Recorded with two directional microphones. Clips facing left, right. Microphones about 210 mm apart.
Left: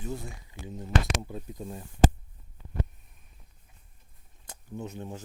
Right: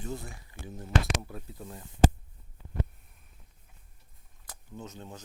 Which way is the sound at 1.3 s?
20° left (ahead or behind).